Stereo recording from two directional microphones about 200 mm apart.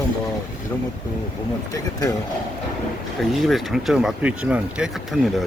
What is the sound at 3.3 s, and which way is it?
Speech, centre (ahead or behind).